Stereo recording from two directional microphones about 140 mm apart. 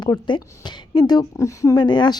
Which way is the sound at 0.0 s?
30° left (ahead or behind).